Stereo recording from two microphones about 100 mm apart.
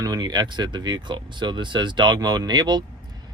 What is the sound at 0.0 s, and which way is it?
Speech, 40° right (ahead or behind).